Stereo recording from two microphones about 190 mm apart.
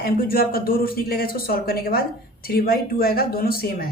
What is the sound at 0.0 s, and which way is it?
A man's voice, 50° left (ahead or behind).